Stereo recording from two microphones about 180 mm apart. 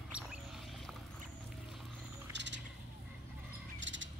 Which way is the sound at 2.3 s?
80° right.